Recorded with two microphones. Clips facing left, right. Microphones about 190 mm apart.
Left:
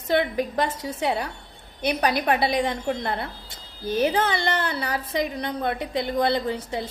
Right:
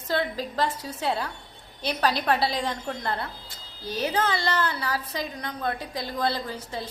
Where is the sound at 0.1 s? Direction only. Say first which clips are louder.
Left 5 dB; 20° left (ahead or behind).